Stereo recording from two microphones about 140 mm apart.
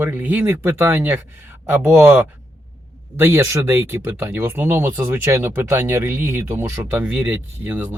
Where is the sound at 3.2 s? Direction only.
15° right (ahead or behind).